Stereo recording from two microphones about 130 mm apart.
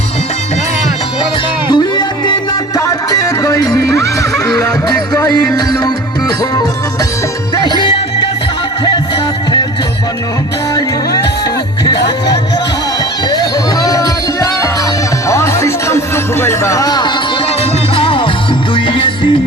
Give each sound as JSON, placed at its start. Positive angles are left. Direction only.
{"t": 1.7, "sound": "music", "side_deg": 35}
{"t": 7.6, "sound": "music", "side_deg": 35}
{"t": 11.9, "sound": "music", "side_deg": 30}
{"t": 17.6, "sound": "music", "side_deg": 45}